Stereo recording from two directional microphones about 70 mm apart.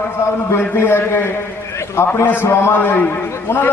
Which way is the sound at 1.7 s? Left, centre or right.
Left.